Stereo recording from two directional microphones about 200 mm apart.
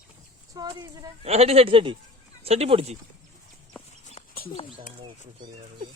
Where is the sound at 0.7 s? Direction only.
20° right (ahead or behind).